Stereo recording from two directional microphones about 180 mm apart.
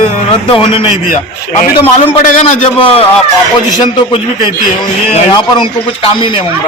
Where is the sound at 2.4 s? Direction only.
30° left (ahead or behind).